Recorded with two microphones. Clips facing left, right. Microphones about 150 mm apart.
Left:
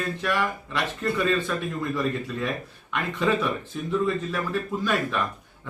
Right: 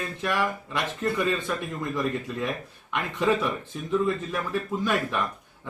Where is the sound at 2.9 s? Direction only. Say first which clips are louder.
Even; 15° right (ahead or behind).